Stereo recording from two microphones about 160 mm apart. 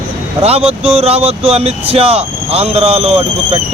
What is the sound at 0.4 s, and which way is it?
Speech, 40° right (ahead or behind).